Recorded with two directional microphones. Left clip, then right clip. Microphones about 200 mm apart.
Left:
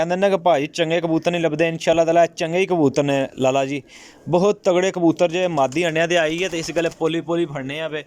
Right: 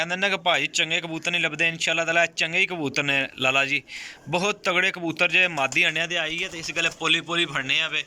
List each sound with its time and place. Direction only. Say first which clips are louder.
0.0 s speech: left 6 dB; 40° left (ahead or behind)